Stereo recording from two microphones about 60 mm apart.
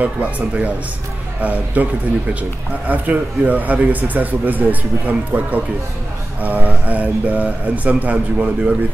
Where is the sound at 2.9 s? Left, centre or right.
Right.